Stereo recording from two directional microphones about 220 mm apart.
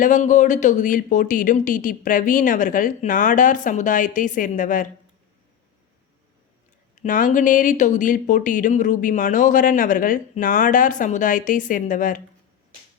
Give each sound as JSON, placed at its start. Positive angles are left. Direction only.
{"t": 0.0, "sound": "speech", "side_deg": 35}
{"t": 6.9, "sound": "speech", "side_deg": 35}